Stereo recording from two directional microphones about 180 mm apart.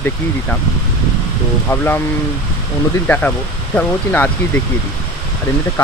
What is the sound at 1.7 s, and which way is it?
Speech, 10° left (ahead or behind).